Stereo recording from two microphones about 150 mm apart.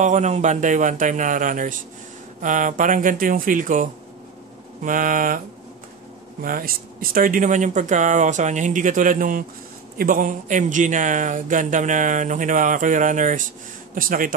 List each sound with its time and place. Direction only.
0.0 s speech: 50° right (ahead or behind)
6.4 s speech: 75° right (ahead or behind)